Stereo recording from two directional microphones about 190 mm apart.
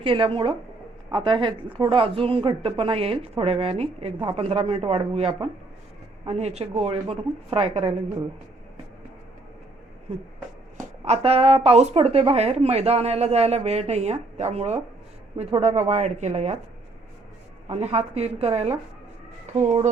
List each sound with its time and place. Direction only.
0.0 s a woman's voice: 30° right (ahead or behind)
11.0 s a woman's voice: 30° right (ahead or behind)
17.7 s a woman's voice: 35° right (ahead or behind)